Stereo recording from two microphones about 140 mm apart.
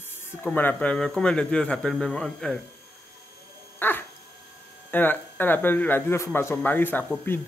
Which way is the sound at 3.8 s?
15° left (ahead or behind).